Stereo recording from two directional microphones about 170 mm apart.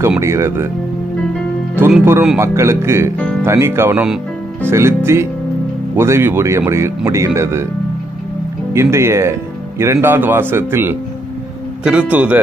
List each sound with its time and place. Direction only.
0.2 s speech: 15° right (ahead or behind)
1.8 s speech: 10° right (ahead or behind)
8.7 s speech: 15° right (ahead or behind)